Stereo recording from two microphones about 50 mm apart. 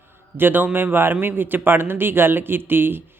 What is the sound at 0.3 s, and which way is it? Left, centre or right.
Speech, right.